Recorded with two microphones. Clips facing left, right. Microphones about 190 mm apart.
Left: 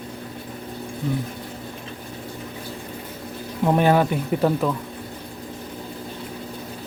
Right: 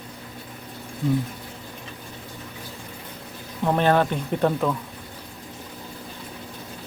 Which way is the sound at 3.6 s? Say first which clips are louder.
Left 2 dB; 10° left (ahead or behind).